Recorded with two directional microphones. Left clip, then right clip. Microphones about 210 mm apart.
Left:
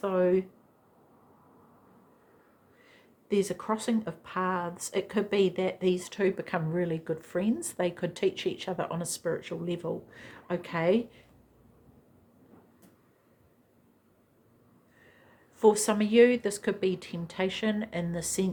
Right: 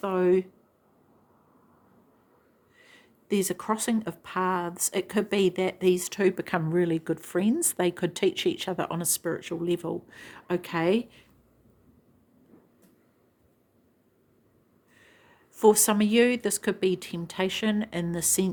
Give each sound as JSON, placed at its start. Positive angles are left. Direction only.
{"t": 0.0, "sound": "speech", "side_deg": -50}
{"t": 2.8, "sound": "speech", "side_deg": -50}
{"t": 15.5, "sound": "speech", "side_deg": -45}